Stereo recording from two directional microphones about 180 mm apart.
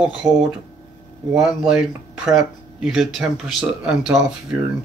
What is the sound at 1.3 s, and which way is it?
Speech, 5° right (ahead or behind).